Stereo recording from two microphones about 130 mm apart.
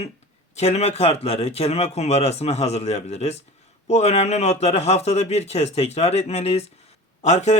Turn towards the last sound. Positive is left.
turn(degrees=60)  # may be behind; listen again after turning